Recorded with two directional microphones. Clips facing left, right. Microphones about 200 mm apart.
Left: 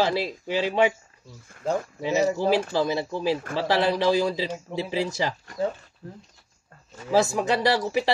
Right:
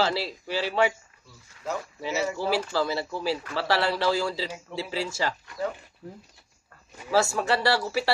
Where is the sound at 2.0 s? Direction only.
15° left (ahead or behind).